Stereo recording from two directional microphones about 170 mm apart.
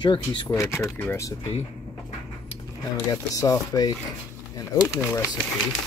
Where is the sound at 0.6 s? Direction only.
15° left (ahead or behind).